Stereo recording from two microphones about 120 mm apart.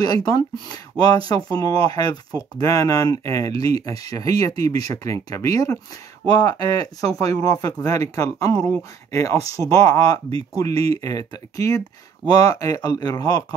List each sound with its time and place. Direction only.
0.0 s speech: 30° left (ahead or behind)